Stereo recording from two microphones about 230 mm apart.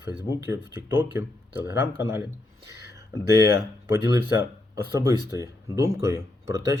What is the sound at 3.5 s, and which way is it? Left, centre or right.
Speech, centre.